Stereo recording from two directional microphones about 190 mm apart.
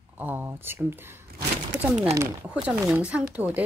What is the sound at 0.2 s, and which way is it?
Speech, 10° right (ahead or behind).